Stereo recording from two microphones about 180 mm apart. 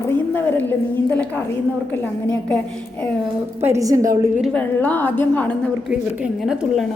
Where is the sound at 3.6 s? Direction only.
15° right (ahead or behind).